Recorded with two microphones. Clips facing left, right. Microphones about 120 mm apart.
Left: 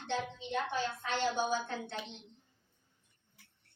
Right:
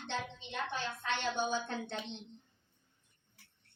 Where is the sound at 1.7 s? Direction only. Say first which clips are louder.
Right 1 dB; 20° right (ahead or behind).